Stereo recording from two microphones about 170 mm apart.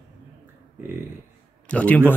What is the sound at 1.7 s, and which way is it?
Speech, 10° left (ahead or behind).